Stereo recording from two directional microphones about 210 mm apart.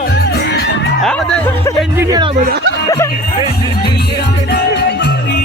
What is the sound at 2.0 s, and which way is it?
Speech, 20° right (ahead or behind).